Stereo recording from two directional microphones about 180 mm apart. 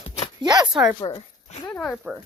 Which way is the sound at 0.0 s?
35° left (ahead or behind).